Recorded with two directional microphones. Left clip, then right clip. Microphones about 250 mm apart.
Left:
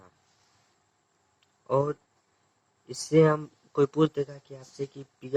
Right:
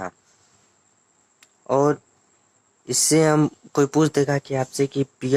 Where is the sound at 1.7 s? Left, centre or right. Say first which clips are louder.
Right 8 dB; right.